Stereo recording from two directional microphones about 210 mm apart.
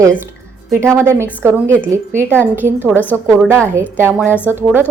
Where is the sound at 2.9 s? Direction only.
10° left (ahead or behind).